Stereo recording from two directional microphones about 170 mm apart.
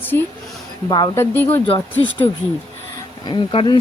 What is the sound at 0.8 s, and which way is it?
Speech, 25° left (ahead or behind).